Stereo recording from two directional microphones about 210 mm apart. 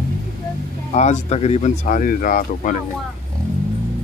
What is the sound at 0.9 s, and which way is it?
Speech, 35° left (ahead or behind).